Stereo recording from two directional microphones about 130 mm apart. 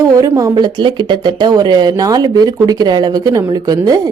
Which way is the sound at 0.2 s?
25° right (ahead or behind).